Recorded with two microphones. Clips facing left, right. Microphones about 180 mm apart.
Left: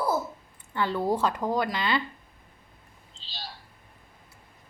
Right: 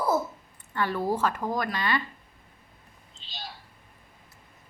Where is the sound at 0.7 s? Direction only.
20° left (ahead or behind).